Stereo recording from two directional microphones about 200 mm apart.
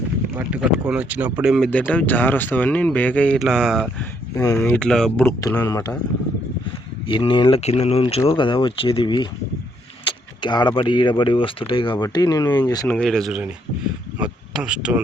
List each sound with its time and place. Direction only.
0.3 s speech: 5° right (ahead or behind)
4.4 s speech: 15° left (ahead or behind)
5.4 s speech: 15° left (ahead or behind)
7.1 s speech: 25° left (ahead or behind)
13.0 s speech: centre (ahead or behind)